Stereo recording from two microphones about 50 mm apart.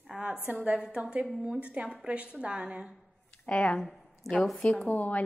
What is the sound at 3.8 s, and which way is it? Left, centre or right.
Speech, centre.